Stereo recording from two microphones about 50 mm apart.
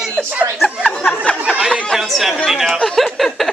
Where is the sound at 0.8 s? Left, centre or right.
Centre.